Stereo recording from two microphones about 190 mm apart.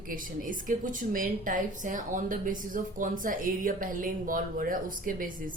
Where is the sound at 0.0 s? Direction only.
45° right (ahead or behind).